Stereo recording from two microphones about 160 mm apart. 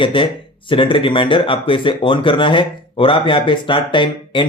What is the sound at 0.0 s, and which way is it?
Speech, 30° left (ahead or behind).